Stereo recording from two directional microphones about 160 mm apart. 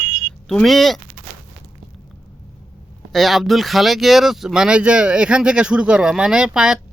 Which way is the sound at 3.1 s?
Centre (ahead or behind).